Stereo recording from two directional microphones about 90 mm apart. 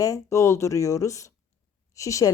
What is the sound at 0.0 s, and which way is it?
Speech, 35° left (ahead or behind).